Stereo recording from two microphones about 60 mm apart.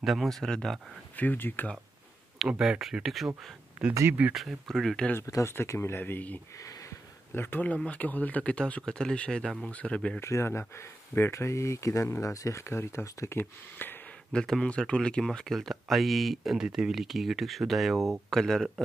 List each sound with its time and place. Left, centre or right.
0.0 s speech: centre
1.1 s speech: left
2.4 s speech: centre
4.3 s speech: centre
5.2 s speech: left
5.8 s speech: left
6.5 s a sound: left
7.3 s speech: left
7.7 s speech: left
8.8 s speech: centre
10.2 s speech: left
13.3 s speech: left
14.3 s speech: centre
16.5 s speech: centre